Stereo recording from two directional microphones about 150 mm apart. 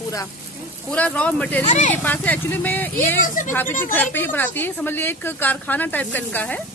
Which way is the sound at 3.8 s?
15° left (ahead or behind).